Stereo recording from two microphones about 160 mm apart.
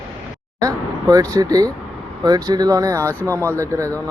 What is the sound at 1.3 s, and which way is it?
Speech, 20° right (ahead or behind).